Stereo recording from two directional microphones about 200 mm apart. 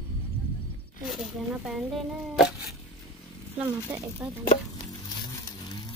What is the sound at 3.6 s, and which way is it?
Speech, 15° right (ahead or behind).